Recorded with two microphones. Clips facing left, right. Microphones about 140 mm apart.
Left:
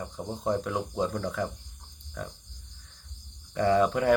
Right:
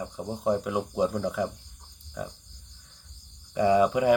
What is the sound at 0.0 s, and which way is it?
Speech, 5° right (ahead or behind).